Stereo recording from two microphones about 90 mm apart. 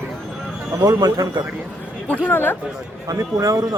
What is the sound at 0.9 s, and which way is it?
Speech, 45° right (ahead or behind).